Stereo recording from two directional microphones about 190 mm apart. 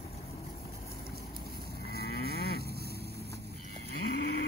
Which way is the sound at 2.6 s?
55° right (ahead or behind).